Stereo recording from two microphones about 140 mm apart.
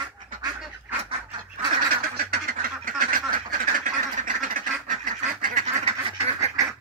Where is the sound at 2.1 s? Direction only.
90° right; by 5.9 s 70° right (ahead or behind).